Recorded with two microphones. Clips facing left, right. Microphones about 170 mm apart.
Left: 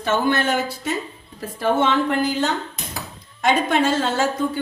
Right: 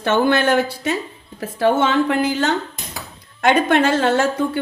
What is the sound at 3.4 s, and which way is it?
A woman's voice, 65° right (ahead or behind).